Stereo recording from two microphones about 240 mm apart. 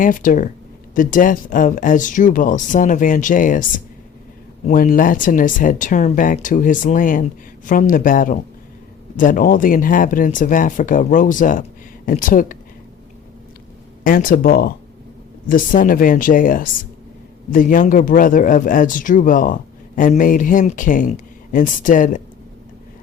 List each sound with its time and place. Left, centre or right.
0.0 s speech: left
14.0 s speech: left